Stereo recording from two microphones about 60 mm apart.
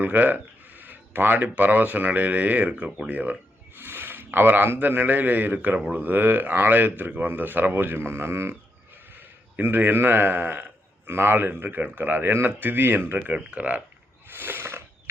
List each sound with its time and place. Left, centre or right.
0.0 s a man's voice: right
9.6 s a man's voice: right
13.1 s speech: right
14.3 s a sound: right